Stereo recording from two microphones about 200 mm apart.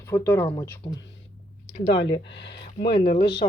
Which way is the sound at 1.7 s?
60° left (ahead or behind).